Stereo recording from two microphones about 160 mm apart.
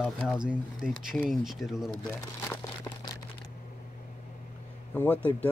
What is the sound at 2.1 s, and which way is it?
Crumpling, 15° left (ahead or behind).